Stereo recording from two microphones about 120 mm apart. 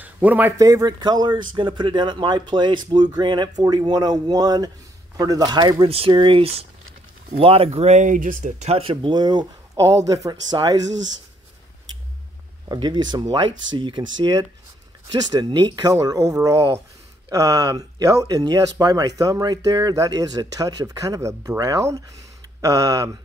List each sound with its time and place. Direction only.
0.0 s speech: 15° right (ahead or behind)
0.6 s speech: 30° right (ahead or behind)
12.6 s speech: 40° right (ahead or behind)
15.3 s speech: 35° right (ahead or behind)